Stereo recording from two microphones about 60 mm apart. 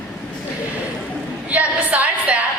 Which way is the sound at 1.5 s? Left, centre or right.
Right.